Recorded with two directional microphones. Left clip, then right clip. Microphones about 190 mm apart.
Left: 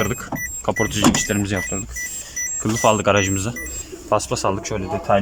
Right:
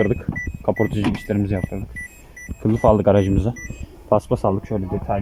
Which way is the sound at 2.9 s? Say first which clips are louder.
Right 1 dB; 25° right (ahead or behind).